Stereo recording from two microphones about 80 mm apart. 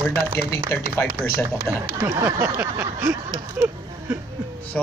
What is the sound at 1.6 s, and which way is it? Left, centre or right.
Speech, right.